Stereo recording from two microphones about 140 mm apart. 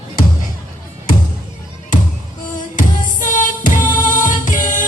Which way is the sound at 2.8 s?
70° left (ahead or behind).